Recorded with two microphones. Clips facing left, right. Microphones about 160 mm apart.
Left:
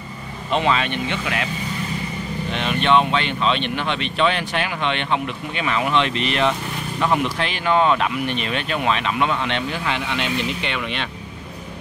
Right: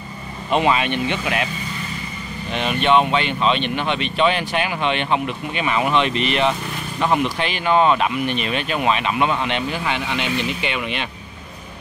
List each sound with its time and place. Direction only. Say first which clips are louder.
0.5 s speech: right 2 dB; 15° right (ahead or behind)
2.5 s speech: right 1 dB; 5° right (ahead or behind)